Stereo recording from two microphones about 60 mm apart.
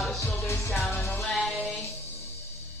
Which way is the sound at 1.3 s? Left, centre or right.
Centre.